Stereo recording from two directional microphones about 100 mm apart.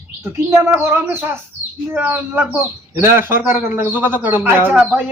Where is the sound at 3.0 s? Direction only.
25° right (ahead or behind).